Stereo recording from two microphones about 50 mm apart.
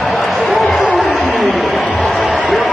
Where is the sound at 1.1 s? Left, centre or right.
Centre.